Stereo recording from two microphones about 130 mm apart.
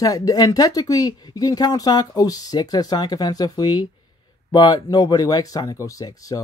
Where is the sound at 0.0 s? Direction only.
30° left (ahead or behind).